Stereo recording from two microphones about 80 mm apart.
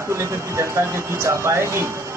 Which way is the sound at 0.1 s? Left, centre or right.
Right.